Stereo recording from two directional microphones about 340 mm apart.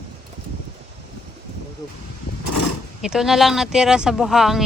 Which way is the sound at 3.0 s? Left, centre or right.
Centre.